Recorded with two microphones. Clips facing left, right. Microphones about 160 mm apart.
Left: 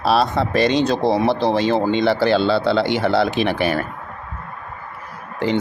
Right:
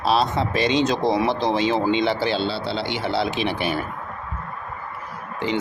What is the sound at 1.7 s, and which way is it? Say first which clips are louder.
Speech: left 3 dB; 50° left (ahead or behind).